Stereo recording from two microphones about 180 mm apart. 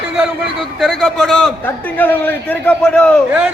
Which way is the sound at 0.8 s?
Centre (ahead or behind).